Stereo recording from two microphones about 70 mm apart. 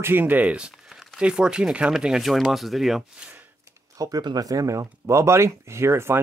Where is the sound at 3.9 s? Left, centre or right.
Right.